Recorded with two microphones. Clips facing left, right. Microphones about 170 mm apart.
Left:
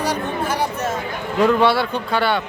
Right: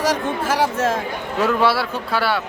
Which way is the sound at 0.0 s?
90° right.